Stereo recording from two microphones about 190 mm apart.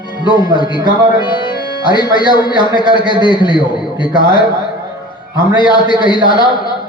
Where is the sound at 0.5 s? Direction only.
25° left (ahead or behind).